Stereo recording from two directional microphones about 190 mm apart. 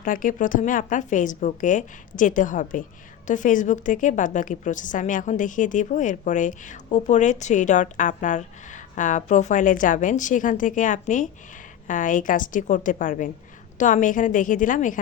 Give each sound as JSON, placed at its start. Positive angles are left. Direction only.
{"t": 0.0, "sound": "a woman's voice", "side_deg": 45}